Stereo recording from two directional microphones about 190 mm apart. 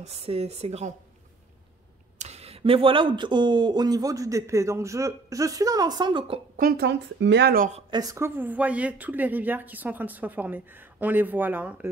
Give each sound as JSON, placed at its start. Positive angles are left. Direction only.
{"t": 0.0, "sound": "a woman's voice", "side_deg": -30}
{"t": 2.1, "sound": "speech", "side_deg": -35}
{"t": 6.5, "sound": "speech", "side_deg": -50}
{"t": 7.9, "sound": "speech", "side_deg": -20}